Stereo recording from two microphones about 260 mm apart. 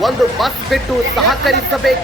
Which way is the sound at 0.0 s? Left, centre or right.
Centre.